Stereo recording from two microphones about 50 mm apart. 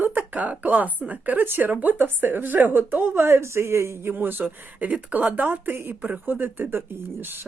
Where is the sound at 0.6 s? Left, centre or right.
Right.